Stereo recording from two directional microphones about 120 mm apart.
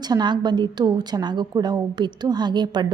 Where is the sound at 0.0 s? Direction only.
35° right (ahead or behind).